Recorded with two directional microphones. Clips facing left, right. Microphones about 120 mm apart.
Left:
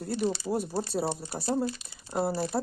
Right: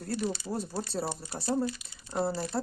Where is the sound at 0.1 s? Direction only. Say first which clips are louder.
Left 4 dB; 30° left (ahead or behind).